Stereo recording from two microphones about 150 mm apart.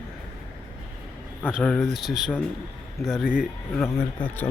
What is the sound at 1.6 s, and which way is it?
Speech, 5° left (ahead or behind).